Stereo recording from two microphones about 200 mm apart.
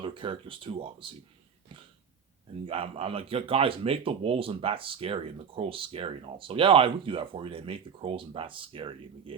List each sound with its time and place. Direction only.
0.0 s speech: 25° right (ahead or behind)
2.6 s speech: 30° right (ahead or behind)